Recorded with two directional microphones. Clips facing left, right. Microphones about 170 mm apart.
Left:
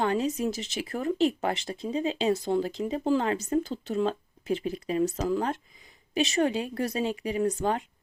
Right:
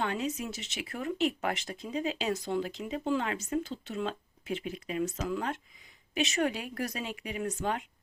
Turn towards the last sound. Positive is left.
turn(degrees=35)  # may be behind; listen again after turning